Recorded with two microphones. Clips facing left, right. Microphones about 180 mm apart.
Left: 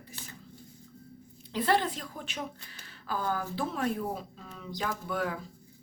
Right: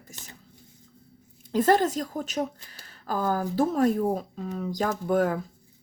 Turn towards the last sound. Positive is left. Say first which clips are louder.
# right 9 dB
turn(degrees=-45)  # may be behind; listen again after turning